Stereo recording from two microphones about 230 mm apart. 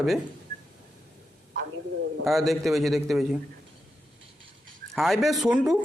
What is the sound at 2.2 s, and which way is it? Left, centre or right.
A man's voice, centre.